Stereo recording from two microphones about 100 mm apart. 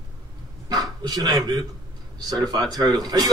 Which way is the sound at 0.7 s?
40° right (ahead or behind).